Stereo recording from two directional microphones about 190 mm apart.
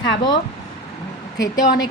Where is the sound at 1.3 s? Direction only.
20° left (ahead or behind).